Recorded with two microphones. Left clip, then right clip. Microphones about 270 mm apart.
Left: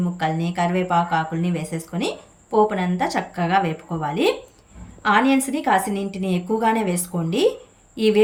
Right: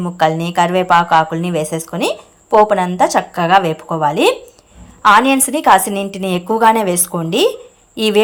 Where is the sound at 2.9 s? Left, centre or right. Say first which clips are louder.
Right 10 dB; centre.